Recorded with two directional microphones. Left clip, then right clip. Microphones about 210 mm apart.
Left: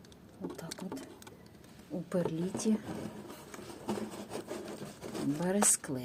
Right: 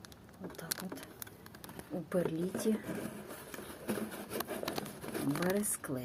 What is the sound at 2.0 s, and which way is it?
Speech, 5° left (ahead or behind).